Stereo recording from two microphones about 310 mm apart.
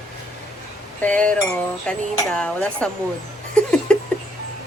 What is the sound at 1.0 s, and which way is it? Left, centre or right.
Speech, centre.